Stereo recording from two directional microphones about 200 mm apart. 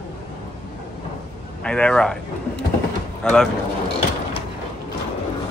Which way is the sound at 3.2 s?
Centre (ahead or behind).